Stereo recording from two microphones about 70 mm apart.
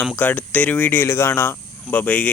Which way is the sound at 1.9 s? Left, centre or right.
Left.